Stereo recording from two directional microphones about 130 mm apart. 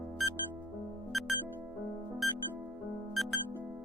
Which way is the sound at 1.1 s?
Centre (ahead or behind).